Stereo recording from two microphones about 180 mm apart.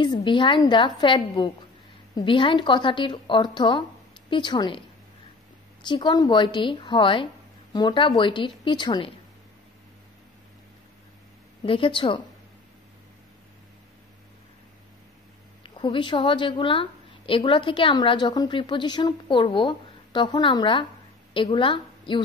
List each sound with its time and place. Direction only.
0.0 s a woman's voice: 25° left (ahead or behind)
5.9 s a woman's voice: 25° left (ahead or behind)
11.6 s a woman's voice: 30° left (ahead or behind)
15.6 s a woman's voice: 25° left (ahead or behind)